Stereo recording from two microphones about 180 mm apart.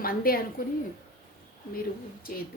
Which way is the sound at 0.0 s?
55° left (ahead or behind).